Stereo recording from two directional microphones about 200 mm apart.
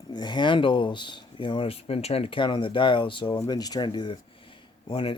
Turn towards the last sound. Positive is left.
turn(degrees=25)  # may be behind; listen again after turning